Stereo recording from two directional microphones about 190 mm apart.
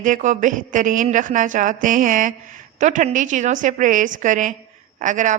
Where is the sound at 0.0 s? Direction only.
40° right (ahead or behind).